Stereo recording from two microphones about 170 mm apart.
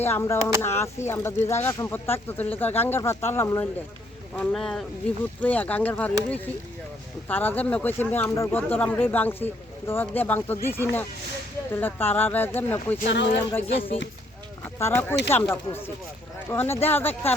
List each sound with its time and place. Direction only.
0.0 s speech: 15° left (ahead or behind)
4.4 s speech: 5° left (ahead or behind)
13.1 s speech: 90° left
14.6 s speech: 15° left (ahead or behind)